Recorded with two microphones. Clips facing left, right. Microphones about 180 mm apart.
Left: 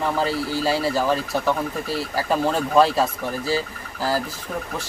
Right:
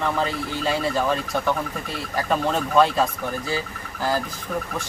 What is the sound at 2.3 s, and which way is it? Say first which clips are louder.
Speech: left 2 dB; 5° left (ahead or behind).